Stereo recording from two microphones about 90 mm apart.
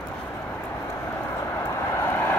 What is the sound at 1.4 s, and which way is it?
Vehicle, 30° left (ahead or behind).